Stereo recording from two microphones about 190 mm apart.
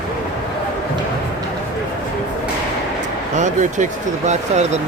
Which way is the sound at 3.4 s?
40° right (ahead or behind).